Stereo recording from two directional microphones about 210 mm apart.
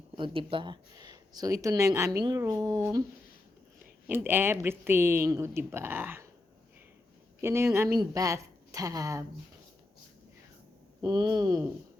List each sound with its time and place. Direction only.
0.2 s speech: 25° right (ahead or behind)
4.0 s speech: 10° right (ahead or behind)
7.4 s speech: 10° right (ahead or behind)
11.0 s speech: 20° right (ahead or behind)